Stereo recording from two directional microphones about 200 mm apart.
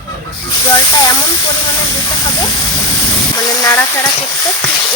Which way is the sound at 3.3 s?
20° left (ahead or behind).